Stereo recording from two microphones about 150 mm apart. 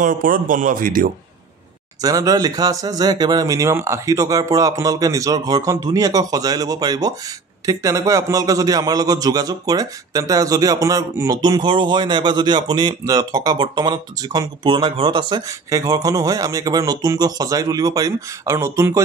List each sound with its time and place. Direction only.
0.0 s speech: 65° right (ahead or behind)
2.0 s a man's voice: 25° right (ahead or behind)